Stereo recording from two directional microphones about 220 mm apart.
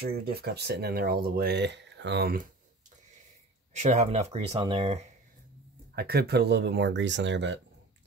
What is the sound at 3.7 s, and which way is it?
Speech, 30° right (ahead or behind).